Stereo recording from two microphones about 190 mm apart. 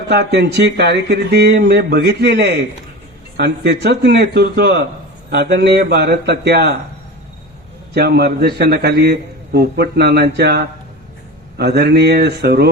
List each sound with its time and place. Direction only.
0.1 s a man's voice: 60° right (ahead or behind)
7.9 s a man's voice: 60° right (ahead or behind)